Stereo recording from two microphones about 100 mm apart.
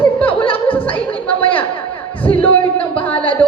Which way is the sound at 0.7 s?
15° left (ahead or behind).